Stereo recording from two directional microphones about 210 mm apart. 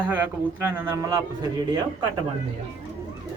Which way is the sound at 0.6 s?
10° right (ahead or behind).